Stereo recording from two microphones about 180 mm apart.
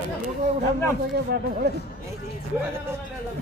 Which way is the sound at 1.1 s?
60° right (ahead or behind).